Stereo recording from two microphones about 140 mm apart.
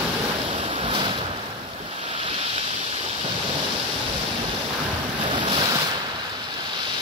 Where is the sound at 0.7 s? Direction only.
40° right (ahead or behind).